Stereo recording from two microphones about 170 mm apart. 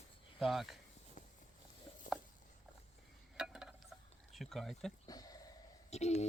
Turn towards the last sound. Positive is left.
turn(degrees=40)  # may be behind; listen again after turning